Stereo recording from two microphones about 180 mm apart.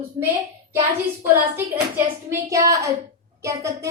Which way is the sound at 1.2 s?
10° right (ahead or behind).